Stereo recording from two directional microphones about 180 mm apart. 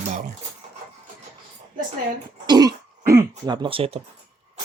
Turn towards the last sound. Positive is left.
turn(degrees=-30)  # may be behind; listen again after turning